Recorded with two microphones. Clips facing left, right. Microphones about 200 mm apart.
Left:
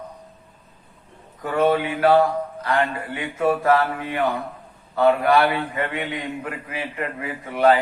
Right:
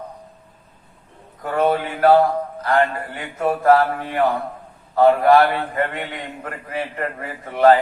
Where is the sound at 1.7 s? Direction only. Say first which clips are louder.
Right 4 dB; 45° right (ahead or behind).